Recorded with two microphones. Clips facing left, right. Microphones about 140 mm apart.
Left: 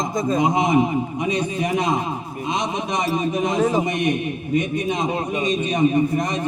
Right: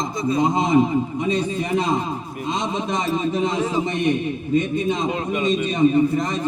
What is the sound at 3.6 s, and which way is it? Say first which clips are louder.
Speech: left 3 dB; 45° left (ahead or behind).